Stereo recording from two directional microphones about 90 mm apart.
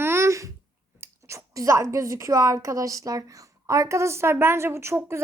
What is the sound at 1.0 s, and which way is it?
A woman's voice, 35° right (ahead or behind).